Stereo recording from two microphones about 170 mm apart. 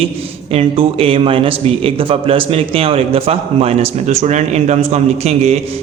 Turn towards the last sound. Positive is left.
turn(degrees=-40)  # may be behind; listen again after turning